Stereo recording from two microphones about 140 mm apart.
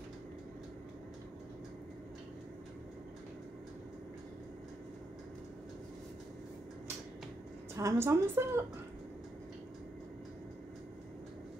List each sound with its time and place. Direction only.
7.7 s a woman's voice: 20° right (ahead or behind)